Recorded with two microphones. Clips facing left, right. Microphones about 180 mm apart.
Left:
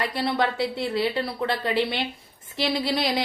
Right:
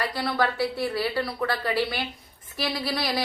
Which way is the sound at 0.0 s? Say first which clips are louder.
Left 1 dB; 25° left (ahead or behind).